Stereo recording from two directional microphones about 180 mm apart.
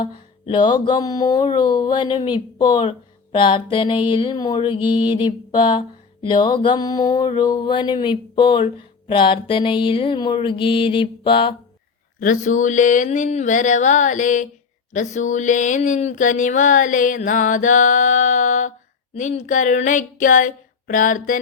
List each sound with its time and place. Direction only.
0.0 s speech: 25° left (ahead or behind)
12.2 s speech: 45° left (ahead or behind)